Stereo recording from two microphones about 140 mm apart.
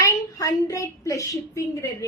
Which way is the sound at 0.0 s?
25° left (ahead or behind).